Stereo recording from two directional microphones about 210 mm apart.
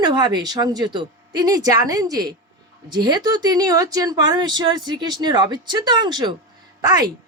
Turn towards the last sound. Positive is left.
turn(degrees=-20)  # may be behind; listen again after turning